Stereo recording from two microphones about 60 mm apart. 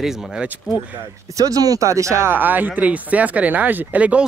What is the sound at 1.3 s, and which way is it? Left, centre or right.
Speech, right.